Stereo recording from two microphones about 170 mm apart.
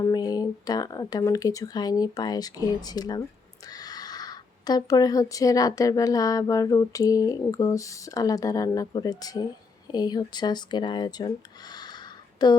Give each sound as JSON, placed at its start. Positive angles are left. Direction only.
{"t": 0.0, "sound": "speech", "side_deg": 20}
{"t": 11.7, "sound": "a sound", "side_deg": 25}
{"t": 12.4, "sound": "speech", "side_deg": 25}